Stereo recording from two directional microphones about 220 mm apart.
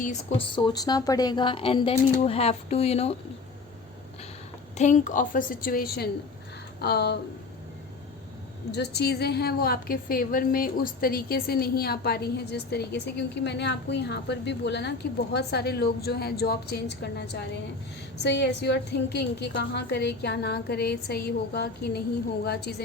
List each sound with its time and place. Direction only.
0.0 s a woman's voice: 30° left (ahead or behind)
4.8 s a woman's voice: 35° left (ahead or behind)
8.7 s a woman's voice: 50° left (ahead or behind)